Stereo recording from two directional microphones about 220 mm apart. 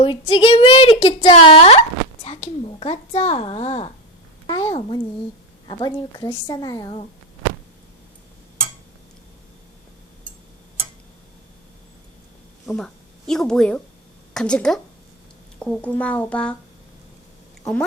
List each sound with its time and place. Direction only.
0.0 s a woman's voice: 20° left (ahead or behind)
2.2 s a sound: 30° left (ahead or behind)
4.4 s a woman's voice: 20° left (ahead or behind)
12.6 s a woman's voice: 5° left (ahead or behind)